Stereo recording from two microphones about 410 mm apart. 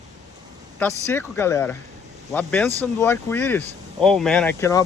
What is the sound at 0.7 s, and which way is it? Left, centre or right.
Speech, centre.